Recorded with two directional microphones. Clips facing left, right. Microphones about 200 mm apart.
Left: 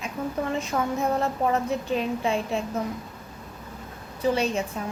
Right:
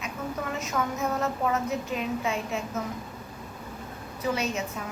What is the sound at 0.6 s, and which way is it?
A woman's voice, 30° left (ahead or behind).